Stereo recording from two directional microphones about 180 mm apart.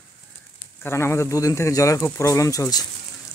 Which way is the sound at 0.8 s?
15° left (ahead or behind).